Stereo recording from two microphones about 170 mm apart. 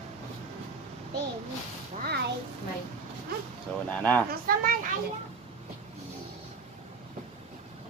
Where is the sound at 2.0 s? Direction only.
70° right (ahead or behind).